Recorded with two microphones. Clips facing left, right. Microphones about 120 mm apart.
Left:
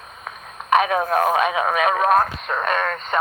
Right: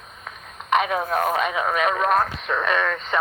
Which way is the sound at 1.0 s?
40° left (ahead or behind).